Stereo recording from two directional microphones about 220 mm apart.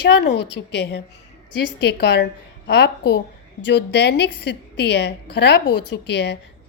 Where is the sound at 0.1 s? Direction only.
50° left (ahead or behind).